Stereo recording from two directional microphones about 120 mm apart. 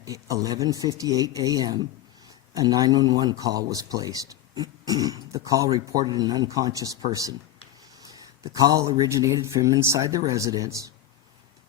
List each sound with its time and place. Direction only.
0.0 s speech: 30° right (ahead or behind)